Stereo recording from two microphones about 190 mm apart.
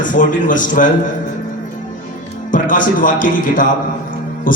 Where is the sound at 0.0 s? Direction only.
45° left (ahead or behind).